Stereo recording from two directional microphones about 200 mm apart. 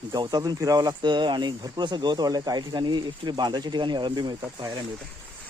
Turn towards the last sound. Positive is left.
turn(degrees=-20)  # may be behind; listen again after turning